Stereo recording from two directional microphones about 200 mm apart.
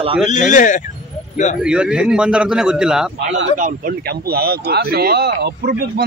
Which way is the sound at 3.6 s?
45° right (ahead or behind).